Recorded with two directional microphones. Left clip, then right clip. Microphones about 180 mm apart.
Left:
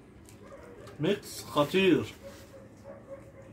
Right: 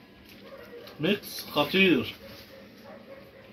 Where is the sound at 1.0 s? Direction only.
20° left (ahead or behind).